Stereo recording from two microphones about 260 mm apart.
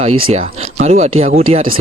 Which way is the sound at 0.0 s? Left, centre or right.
Right.